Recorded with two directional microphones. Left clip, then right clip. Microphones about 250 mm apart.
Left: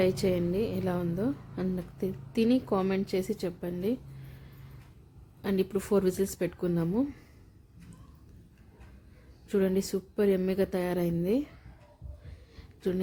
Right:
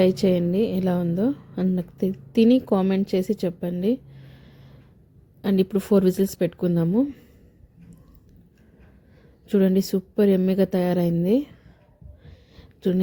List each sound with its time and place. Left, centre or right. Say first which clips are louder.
0.0 s a woman's voice: right 7 dB; centre
5.4 s a woman's voice: right 7 dB; centre
9.5 s a woman's voice: right 7 dB; centre
12.2 s a sound: right 4 dB; centre